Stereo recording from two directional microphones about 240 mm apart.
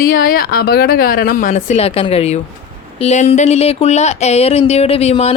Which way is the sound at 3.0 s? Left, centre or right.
Left.